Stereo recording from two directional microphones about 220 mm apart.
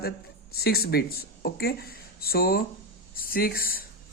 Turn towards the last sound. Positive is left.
turn(degrees=40)  # may be behind; listen again after turning